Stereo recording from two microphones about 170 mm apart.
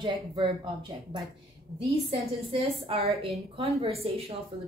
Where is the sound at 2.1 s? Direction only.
35° right (ahead or behind).